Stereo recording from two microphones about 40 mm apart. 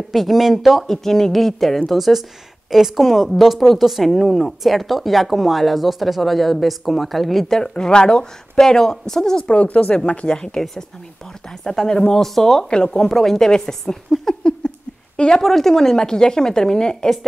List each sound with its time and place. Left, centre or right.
0.1 s speech: centre
0.8 s a woman's voice: centre
9.5 s speech: left
11.6 s a woman's voice: centre
12.6 s speech: left
13.1 s a woman's voice: centre
14.3 s a sound: centre
15.1 s speech: left
15.4 s a woman's voice: centre